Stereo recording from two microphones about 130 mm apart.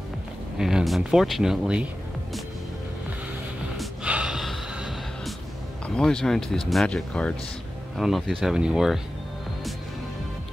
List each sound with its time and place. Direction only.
0.6 s speech: 5° right (ahead or behind)
3.7 s gasp: 5° right (ahead or behind)
5.9 s speech: 5° left (ahead or behind)